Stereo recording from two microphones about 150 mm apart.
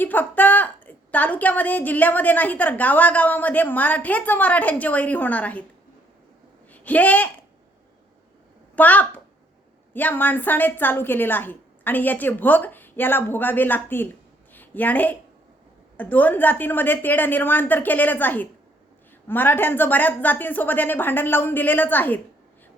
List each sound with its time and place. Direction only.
0.0 s a woman's voice: 10° left (ahead or behind)
6.7 s speech: 10° left (ahead or behind)
8.7 s a woman's voice: 10° left (ahead or behind)
14.5 s a sound: 10° left (ahead or behind)
16.0 s a woman's voice: 10° left (ahead or behind)